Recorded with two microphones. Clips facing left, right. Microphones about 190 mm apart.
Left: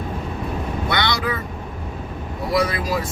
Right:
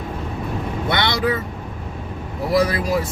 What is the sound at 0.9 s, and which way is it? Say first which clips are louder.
Vehicle: right 3 dB; 25° right (ahead or behind).